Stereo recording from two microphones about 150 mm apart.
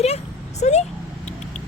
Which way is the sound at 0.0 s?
45° left (ahead or behind).